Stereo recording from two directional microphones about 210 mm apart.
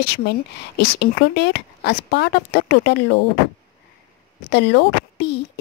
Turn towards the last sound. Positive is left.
turn(degrees=55)  # may be behind; listen again after turning